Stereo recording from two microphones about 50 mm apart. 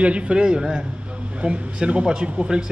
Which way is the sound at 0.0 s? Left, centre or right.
Right.